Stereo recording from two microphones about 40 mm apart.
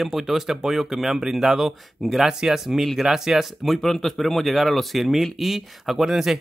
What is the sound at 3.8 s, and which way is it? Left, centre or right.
Speech, centre.